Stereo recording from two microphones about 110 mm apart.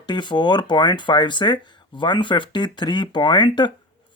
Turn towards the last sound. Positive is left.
turn(degrees=45)  # may be behind; listen again after turning